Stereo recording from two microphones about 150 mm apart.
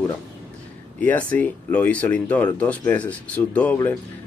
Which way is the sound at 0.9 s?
10° left (ahead or behind).